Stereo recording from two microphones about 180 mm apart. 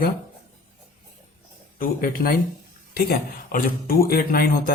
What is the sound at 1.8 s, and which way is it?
A man's voice, 55° left (ahead or behind).